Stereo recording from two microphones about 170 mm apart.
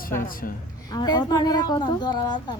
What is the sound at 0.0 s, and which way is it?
Speech, 55° left (ahead or behind).